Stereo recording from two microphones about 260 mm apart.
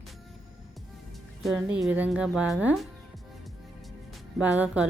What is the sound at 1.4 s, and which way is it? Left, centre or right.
Speech, centre.